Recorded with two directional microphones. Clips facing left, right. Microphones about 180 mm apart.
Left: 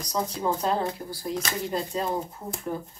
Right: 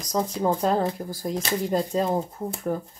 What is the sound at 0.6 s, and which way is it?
Speech, 40° right (ahead or behind).